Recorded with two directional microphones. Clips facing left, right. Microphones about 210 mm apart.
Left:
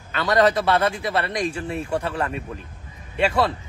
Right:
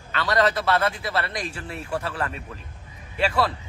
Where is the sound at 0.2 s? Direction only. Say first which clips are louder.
Left 4 dB; 20° left (ahead or behind).